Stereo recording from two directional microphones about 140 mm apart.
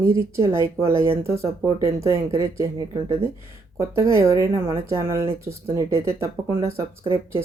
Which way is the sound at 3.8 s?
20° right (ahead or behind).